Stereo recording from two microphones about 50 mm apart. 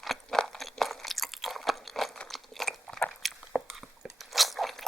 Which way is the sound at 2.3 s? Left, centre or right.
Centre.